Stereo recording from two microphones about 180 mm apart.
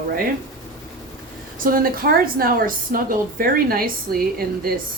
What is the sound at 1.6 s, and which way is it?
A woman's voice, 55° right (ahead or behind).